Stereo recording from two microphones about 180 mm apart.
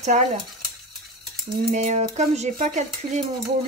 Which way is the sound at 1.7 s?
40° right (ahead or behind).